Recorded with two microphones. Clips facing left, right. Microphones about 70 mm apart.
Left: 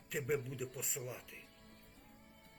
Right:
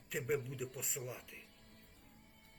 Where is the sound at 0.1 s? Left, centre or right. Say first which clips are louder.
Even; centre.